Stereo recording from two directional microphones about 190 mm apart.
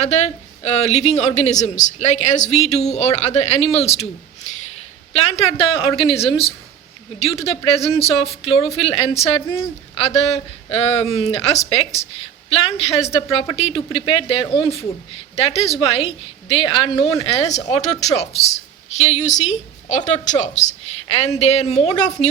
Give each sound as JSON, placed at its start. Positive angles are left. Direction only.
{"t": 0.0, "sound": "a woman's voice", "side_deg": 35}
{"t": 5.1, "sound": "a woman's voice", "side_deg": 30}
{"t": 17.3, "sound": "a woman's voice", "side_deg": 35}